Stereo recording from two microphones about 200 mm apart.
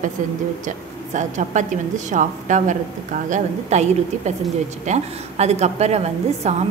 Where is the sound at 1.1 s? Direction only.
35° right (ahead or behind).